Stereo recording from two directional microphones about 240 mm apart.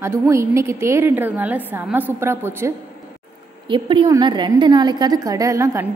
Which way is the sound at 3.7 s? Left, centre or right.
Centre.